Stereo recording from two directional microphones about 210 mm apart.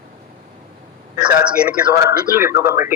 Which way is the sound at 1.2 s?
5° right (ahead or behind).